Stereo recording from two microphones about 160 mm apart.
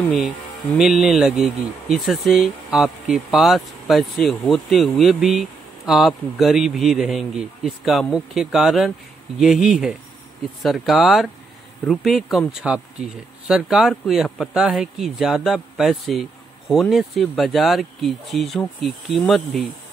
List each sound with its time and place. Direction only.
0.7 s speech: centre (ahead or behind)